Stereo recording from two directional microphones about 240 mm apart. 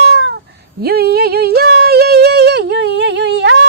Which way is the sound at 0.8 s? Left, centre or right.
Right.